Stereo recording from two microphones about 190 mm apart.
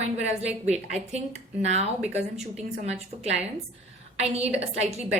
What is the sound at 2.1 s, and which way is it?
A woman's voice, 35° right (ahead or behind).